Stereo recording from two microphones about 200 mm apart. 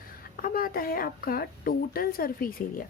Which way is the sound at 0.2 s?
45° left (ahead or behind).